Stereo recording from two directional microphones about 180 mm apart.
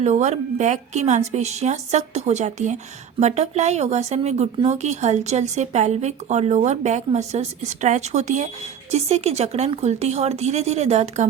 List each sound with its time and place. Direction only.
0.0 s speech: 40° right (ahead or behind)